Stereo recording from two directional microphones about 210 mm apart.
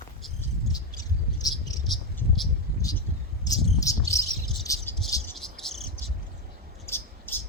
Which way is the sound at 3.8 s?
15° left (ahead or behind).